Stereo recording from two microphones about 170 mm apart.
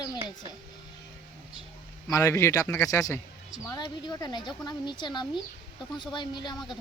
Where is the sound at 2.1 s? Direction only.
15° left (ahead or behind).